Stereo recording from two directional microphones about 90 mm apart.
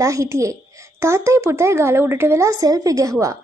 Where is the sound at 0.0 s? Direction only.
35° right (ahead or behind).